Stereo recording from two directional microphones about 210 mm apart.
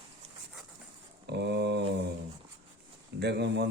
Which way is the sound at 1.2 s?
55° right (ahead or behind).